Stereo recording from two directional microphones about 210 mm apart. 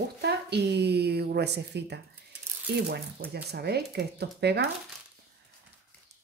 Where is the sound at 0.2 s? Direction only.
50° right (ahead or behind).